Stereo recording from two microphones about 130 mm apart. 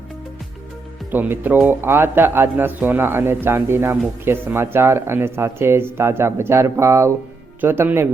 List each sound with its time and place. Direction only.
1.1 s speech: 15° right (ahead or behind)